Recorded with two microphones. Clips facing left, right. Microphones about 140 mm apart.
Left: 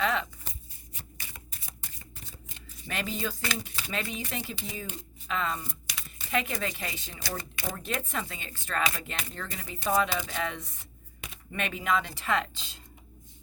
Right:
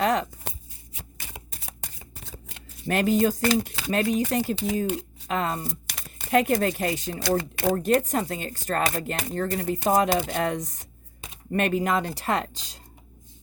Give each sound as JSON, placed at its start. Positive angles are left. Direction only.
{"t": 0.0, "sound": "speech", "side_deg": -45}
{"t": 0.9, "sound": "shuffling cards", "side_deg": -70}
{"t": 2.8, "sound": "speech", "side_deg": -45}
{"t": 7.8, "sound": "speech", "side_deg": -40}